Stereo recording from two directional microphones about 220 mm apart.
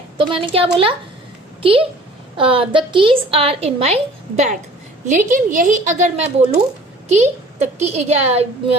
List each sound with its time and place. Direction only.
0.2 s a woman's voice: 25° right (ahead or behind)
2.4 s a woman's voice: 25° right (ahead or behind)